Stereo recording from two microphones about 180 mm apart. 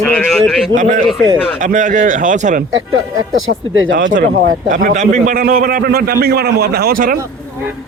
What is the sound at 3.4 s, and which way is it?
Speech, 90° right.